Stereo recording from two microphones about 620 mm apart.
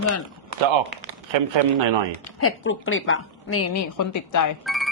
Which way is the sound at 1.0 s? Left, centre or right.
Right.